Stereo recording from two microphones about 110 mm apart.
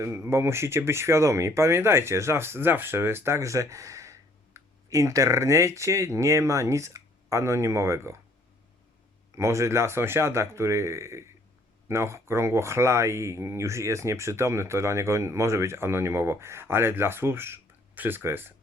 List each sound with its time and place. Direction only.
0.0 s speech: 25° right (ahead or behind)
9.3 s speech: 25° right (ahead or behind)